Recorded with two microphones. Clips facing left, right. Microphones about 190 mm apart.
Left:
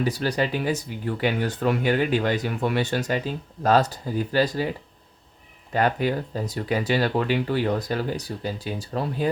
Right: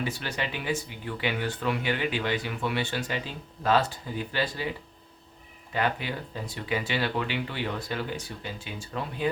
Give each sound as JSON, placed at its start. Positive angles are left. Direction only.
{"t": 0.0, "sound": "speech", "side_deg": 40}
{"t": 5.7, "sound": "speech", "side_deg": 45}